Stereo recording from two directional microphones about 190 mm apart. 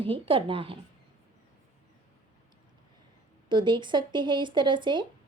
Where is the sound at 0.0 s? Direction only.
25° right (ahead or behind).